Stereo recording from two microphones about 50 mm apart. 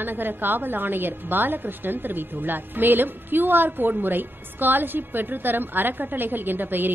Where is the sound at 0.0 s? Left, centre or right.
Right.